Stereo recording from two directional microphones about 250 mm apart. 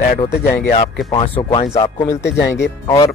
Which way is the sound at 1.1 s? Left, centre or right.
Left.